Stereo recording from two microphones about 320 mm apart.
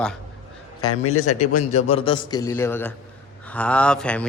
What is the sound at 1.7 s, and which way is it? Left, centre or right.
A man's voice, centre.